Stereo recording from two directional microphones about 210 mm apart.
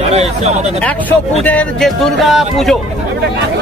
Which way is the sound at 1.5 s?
5° left (ahead or behind).